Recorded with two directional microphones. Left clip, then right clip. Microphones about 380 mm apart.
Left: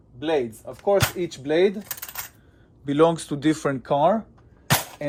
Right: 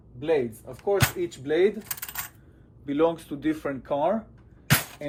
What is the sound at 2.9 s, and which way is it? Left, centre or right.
Speech, left.